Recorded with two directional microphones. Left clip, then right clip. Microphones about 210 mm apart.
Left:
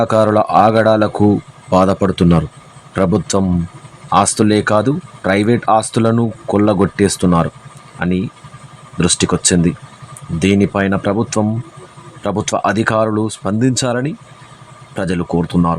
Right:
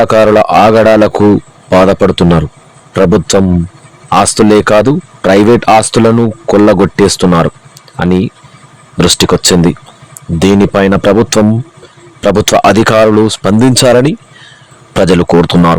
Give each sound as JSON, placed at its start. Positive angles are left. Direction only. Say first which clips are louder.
{"t": 0.0, "sound": "speech", "louder": "right 7 dB", "side_deg": -40}